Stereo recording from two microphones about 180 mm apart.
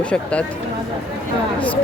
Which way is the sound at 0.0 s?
5° left (ahead or behind).